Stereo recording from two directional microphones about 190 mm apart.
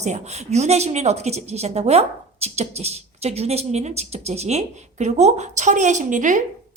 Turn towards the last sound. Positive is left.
turn(degrees=-40)  # may be behind; listen again after turning